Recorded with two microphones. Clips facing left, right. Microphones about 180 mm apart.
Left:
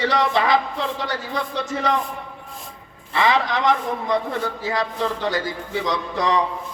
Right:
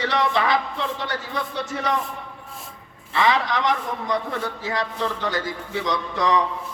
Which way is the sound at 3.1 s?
30° left (ahead or behind).